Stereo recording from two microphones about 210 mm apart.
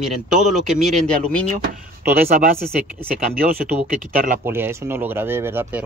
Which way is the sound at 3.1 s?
45° right (ahead or behind).